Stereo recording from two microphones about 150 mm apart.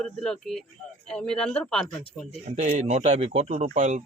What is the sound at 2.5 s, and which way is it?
Speech, 50° right (ahead or behind).